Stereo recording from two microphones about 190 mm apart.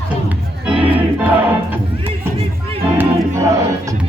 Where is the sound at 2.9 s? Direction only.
15° right (ahead or behind).